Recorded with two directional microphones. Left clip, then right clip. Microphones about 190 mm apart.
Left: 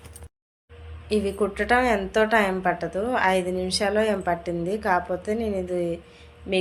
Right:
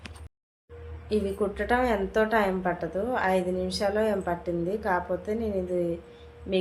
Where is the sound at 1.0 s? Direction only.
10° left (ahead or behind).